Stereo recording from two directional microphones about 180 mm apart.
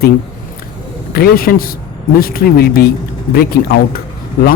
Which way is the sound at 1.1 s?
55° left (ahead or behind).